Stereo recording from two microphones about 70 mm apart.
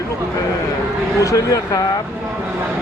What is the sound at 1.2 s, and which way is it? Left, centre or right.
Speech, left.